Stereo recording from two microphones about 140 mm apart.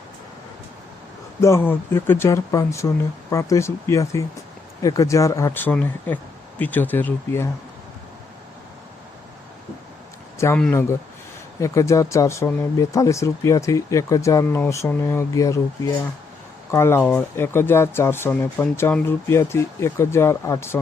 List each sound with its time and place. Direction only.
1.4 s speech: 20° left (ahead or behind)
5.5 s speech: 15° left (ahead or behind)
10.3 s a man's voice: 20° left (ahead or behind)